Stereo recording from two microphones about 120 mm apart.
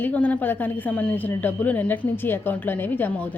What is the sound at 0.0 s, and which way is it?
A woman's voice, 15° left (ahead or behind).